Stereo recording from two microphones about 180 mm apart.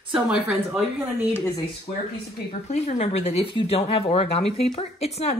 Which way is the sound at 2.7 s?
35° left (ahead or behind).